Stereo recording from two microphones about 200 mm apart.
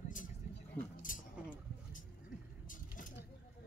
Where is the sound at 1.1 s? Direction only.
40° left (ahead or behind).